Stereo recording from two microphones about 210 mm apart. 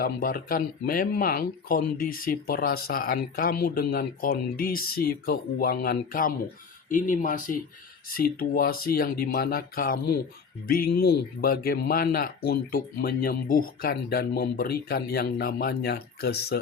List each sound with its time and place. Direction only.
0.0 s speech: 45° left (ahead or behind)